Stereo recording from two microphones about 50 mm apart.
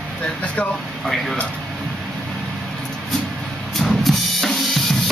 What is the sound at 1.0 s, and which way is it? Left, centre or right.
Speech, centre.